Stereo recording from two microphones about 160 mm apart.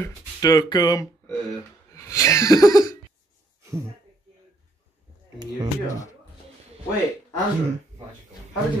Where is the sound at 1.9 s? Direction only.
20° left (ahead or behind).